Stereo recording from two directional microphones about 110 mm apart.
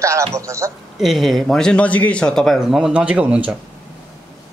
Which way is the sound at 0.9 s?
Centre (ahead or behind).